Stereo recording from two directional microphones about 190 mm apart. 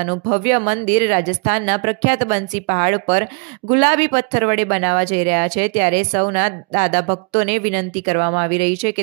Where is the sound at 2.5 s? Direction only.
40° right (ahead or behind).